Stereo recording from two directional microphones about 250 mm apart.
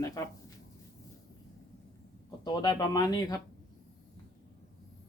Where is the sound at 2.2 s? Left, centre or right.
Centre.